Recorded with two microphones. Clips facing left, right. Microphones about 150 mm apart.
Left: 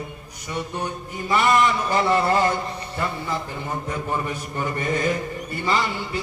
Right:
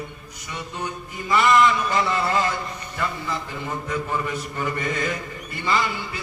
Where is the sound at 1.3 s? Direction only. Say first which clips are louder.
Right 1 dB; 35° left (ahead or behind).